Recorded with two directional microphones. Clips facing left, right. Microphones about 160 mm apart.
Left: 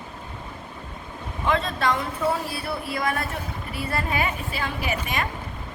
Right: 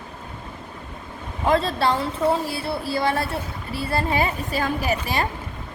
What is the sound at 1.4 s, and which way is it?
A woman's voice, 35° right (ahead or behind).